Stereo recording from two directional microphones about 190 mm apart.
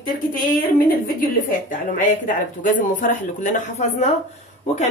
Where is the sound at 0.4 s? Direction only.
50° left (ahead or behind).